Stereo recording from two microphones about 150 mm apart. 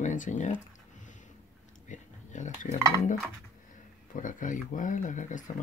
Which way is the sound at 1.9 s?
55° left (ahead or behind).